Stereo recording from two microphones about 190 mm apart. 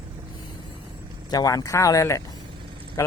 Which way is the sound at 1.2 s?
20° left (ahead or behind).